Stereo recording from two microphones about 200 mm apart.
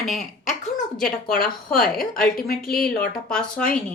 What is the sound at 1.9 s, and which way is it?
Speech, 5° left (ahead or behind).